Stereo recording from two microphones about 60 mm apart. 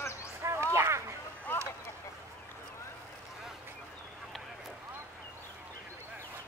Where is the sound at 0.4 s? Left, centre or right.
Right.